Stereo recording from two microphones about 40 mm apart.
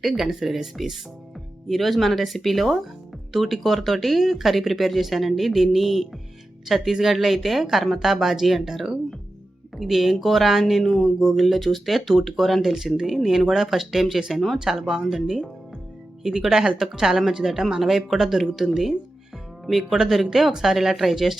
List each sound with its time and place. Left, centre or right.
0.0 s speech: centre
11.2 s speech: centre
11.4 s speech: centre
12.7 s speech: centre
16.5 s speech: centre